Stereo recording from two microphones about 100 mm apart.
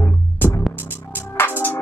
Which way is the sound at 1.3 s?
20° left (ahead or behind).